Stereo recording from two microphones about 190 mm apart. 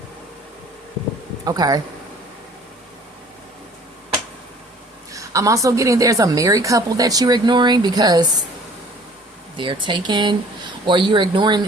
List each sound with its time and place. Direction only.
1.5 s speech: 20° right (ahead or behind)
5.1 s a woman's voice: 15° right (ahead or behind)
9.6 s speech: 25° right (ahead or behind)